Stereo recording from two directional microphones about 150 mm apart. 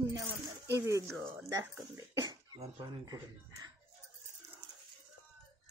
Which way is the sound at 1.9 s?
25° right (ahead or behind).